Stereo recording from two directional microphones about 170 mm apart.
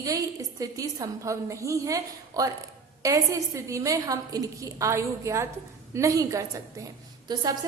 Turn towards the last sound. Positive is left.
turn(degrees=-25)  # may be behind; listen again after turning